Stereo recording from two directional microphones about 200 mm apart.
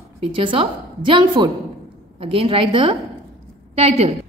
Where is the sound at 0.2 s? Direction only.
25° right (ahead or behind).